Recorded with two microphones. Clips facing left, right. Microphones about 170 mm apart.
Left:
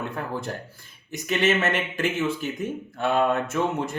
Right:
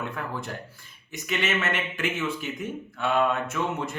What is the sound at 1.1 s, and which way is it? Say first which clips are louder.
Speech: left 5 dB; 35° left (ahead or behind).